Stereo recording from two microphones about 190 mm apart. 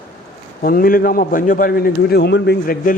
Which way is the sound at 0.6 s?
50° left (ahead or behind).